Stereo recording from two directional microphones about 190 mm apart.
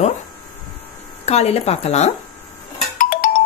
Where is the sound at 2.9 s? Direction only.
45° left (ahead or behind).